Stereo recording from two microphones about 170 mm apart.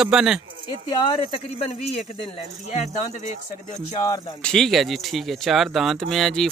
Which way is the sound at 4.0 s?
20° left (ahead or behind).